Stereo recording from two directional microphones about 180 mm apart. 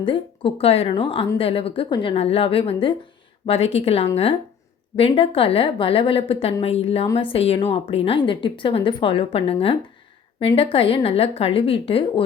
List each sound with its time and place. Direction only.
0.0 s a woman's voice: 30° left (ahead or behind)